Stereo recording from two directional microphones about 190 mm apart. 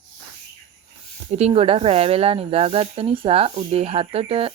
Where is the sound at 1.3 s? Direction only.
35° right (ahead or behind).